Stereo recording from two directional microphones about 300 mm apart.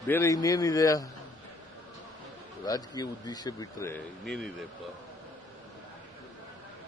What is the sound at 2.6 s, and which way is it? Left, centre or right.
Speech, centre.